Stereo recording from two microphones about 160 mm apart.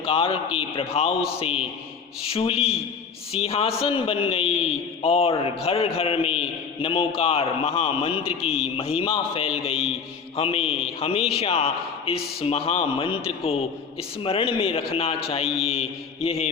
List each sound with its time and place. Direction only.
0.0 s a man's voice: 35° left (ahead or behind)